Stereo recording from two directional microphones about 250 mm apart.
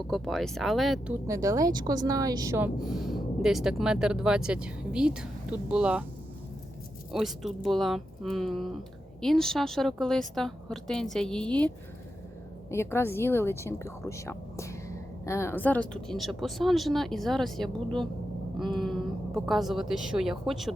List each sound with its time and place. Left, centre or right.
0.1 s speech: centre
1.3 s speech: centre
7.1 s speech: centre
12.7 s speech: centre